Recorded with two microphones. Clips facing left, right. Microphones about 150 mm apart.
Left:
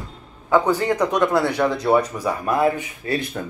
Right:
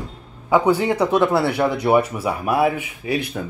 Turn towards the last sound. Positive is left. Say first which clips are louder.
# even
turn(degrees=-10)  # may be behind; listen again after turning